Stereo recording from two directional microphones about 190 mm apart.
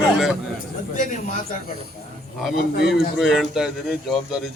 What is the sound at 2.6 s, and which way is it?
Speech, 55° left (ahead or behind).